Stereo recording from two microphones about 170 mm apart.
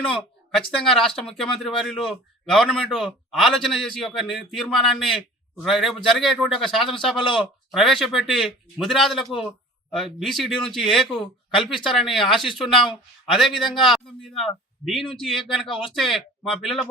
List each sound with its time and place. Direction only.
0.9 s a man's voice: centre (ahead or behind)
15.6 s speech: 30° left (ahead or behind)
15.9 s a man's voice: centre (ahead or behind)